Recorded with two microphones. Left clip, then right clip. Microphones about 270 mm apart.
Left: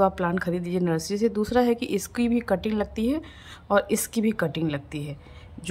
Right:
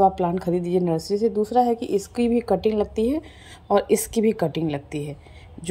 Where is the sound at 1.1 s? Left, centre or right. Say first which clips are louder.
Right 3 dB; left.